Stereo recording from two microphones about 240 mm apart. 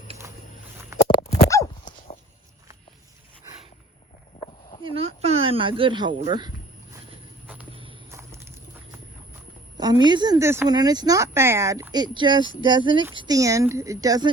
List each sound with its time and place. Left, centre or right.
1.0 s a sound: centre
4.9 s speech: right
7.4 s walk: centre
9.7 s speech: centre